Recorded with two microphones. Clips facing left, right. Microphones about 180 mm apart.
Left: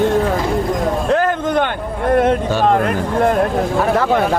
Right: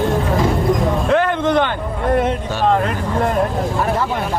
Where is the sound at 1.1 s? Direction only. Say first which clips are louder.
Right 1 dB; 40° left (ahead or behind).